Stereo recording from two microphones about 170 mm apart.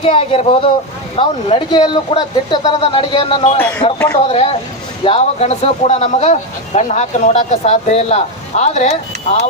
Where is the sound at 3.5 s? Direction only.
10° left (ahead or behind).